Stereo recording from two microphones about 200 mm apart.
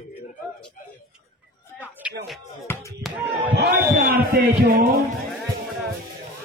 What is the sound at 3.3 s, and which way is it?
Speech, 30° right (ahead or behind).